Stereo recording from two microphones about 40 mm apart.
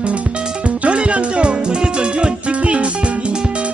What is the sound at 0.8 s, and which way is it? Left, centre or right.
Music, right.